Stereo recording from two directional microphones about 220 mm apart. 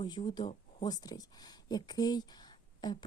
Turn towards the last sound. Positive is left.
turn(degrees=20)  # may be behind; listen again after turning